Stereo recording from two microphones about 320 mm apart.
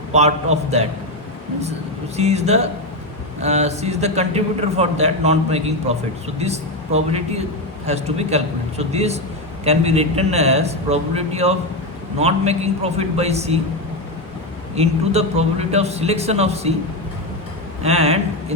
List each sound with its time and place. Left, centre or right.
0.1 s a man's voice: right
2.1 s a man's voice: centre
14.8 s a man's voice: centre
17.8 s speech: centre